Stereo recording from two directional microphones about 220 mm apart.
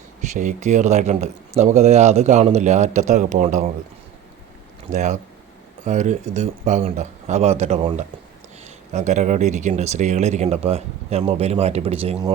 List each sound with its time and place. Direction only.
0.2 s speech: 35° right (ahead or behind)
4.9 s speech: 30° right (ahead or behind)